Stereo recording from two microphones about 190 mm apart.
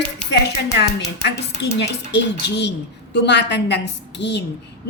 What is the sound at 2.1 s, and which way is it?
A woman's voice, 65° left (ahead or behind).